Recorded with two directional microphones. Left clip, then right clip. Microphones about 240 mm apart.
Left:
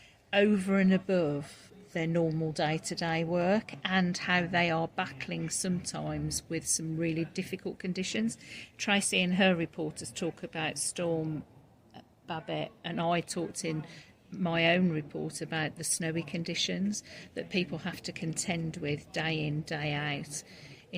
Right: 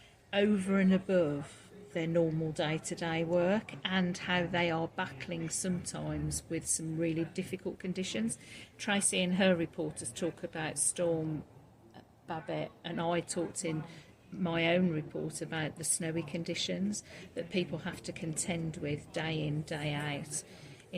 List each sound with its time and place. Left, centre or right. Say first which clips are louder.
0.3 s speech: left 4 dB; left
12.3 s speech: left 2 dB; left